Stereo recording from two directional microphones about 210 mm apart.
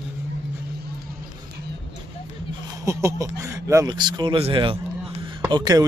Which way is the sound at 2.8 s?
15° right (ahead or behind).